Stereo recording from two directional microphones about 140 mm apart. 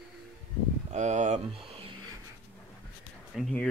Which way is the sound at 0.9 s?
55° right (ahead or behind).